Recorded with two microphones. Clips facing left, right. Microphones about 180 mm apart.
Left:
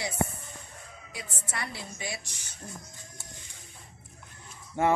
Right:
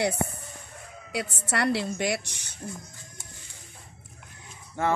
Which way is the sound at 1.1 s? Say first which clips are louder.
Right 10 dB; 75° right (ahead or behind).